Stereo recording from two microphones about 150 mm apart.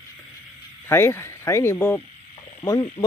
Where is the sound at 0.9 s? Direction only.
15° left (ahead or behind).